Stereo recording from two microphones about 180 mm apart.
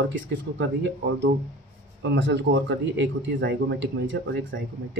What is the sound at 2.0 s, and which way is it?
Speech, 90° right.